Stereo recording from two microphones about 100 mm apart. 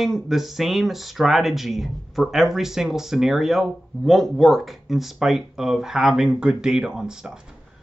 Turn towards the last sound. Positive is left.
turn(degrees=-5)  # may be behind; listen again after turning